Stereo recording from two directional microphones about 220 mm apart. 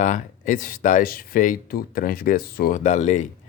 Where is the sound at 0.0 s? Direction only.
35° left (ahead or behind).